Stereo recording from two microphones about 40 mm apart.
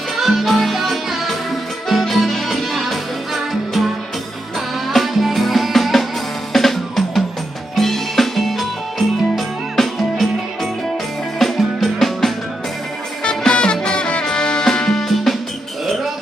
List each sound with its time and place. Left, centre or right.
0.2 s music: centre
13.2 s music: left; by 15.4 s centre